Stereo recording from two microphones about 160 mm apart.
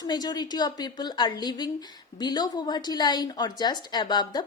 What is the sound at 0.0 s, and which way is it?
A woman's voice, 25° left (ahead or behind).